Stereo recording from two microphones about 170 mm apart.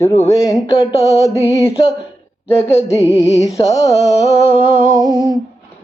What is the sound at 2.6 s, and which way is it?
Music, 40° left (ahead or behind).